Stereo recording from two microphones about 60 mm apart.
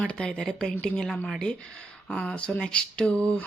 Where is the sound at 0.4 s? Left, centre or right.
Centre.